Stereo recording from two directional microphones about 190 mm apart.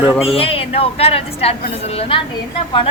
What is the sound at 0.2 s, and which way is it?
A woman's voice, 30° left (ahead or behind).